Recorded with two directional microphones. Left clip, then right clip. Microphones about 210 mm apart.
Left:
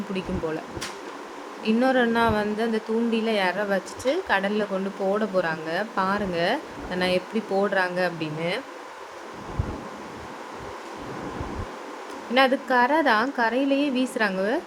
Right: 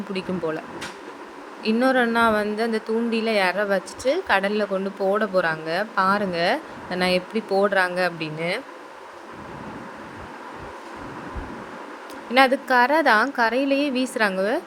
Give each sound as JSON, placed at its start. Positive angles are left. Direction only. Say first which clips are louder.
{"t": 0.1, "sound": "a woman's voice", "louder": "right 3 dB", "side_deg": -15}
{"t": 1.6, "sound": "a woman's voice", "louder": "right 2 dB", "side_deg": -15}
{"t": 12.3, "sound": "a woman's voice", "louder": "right 3 dB", "side_deg": -15}